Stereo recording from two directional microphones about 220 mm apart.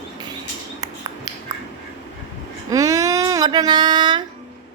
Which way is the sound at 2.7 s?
15° right (ahead or behind).